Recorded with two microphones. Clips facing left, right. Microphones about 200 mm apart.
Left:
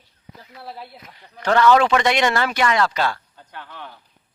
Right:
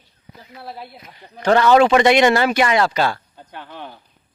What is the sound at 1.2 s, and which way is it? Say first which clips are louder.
Speech: right 5 dB; 25° right (ahead or behind).